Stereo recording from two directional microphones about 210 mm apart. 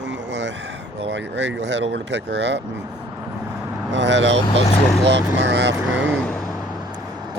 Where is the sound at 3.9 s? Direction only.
60° right (ahead or behind).